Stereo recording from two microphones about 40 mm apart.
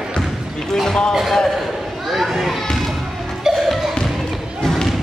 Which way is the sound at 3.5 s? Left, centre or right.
Centre.